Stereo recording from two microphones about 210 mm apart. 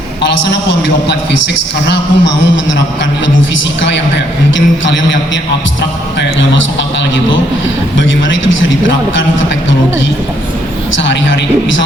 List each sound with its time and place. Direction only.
0.2 s a man's voice: 60° left (ahead or behind)
1.9 s a man's voice: 60° left (ahead or behind)
7.9 s a man's voice: 65° left (ahead or behind)
10.9 s a man's voice: 60° left (ahead or behind)